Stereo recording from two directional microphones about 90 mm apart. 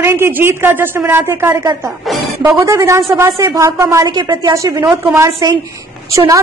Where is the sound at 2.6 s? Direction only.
35° right (ahead or behind).